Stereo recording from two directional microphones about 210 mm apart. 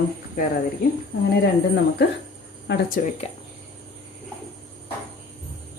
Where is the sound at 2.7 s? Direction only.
45° left (ahead or behind).